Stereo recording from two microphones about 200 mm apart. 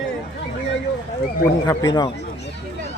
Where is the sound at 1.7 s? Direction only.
20° left (ahead or behind).